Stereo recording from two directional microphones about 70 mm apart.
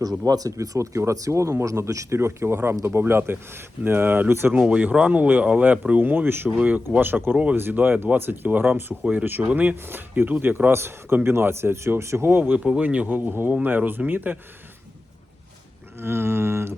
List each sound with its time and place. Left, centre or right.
0.3 s speech: right
4.5 s speech: centre
13.1 s speech: right
16.0 s speech: right